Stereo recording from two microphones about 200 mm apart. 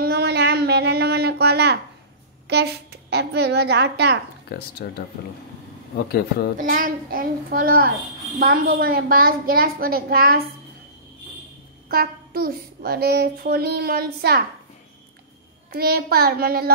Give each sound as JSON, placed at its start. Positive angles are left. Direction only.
{"t": 0.0, "sound": "a sound", "side_deg": -55}
{"t": 2.4, "sound": "a woman's voice", "side_deg": -55}
{"t": 4.5, "sound": "speech", "side_deg": 50}
{"t": 6.6, "sound": "child singing", "side_deg": -45}
{"t": 11.9, "sound": "child singing", "side_deg": -50}
{"t": 15.7, "sound": "child singing", "side_deg": -50}